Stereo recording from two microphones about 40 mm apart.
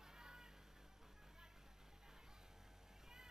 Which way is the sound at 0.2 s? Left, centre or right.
Centre.